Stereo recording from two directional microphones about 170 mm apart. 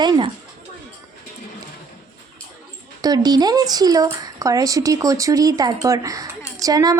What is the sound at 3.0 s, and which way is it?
Speech, 25° right (ahead or behind).